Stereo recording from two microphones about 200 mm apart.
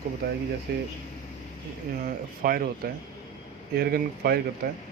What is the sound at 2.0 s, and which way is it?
Speech, 45° right (ahead or behind).